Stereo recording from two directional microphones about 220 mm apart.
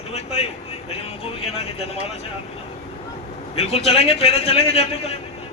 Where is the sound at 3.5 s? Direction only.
30° left (ahead or behind).